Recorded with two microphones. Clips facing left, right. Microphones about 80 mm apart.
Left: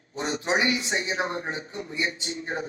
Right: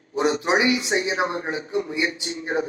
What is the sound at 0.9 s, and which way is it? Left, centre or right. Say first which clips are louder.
Speech: right 5 dB; right.